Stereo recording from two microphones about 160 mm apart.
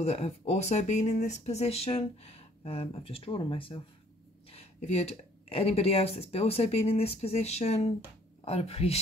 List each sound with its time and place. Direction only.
0.0 s speech: 40° left (ahead or behind)